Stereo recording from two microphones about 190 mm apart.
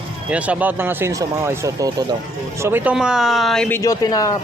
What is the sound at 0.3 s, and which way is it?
Speech, 5° right (ahead or behind).